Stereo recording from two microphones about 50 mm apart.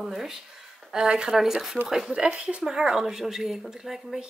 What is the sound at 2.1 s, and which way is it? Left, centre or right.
Speech, centre.